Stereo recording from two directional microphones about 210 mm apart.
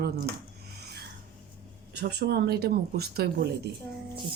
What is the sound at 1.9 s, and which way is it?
Speech, 50° right (ahead or behind).